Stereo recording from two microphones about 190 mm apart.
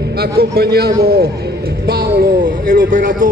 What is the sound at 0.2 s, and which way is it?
A man's voice, 55° right (ahead or behind).